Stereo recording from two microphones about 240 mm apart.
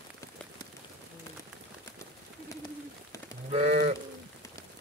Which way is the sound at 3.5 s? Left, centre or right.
Right.